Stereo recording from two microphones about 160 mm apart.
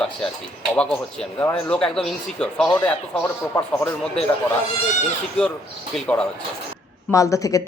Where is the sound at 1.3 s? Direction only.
10° left (ahead or behind).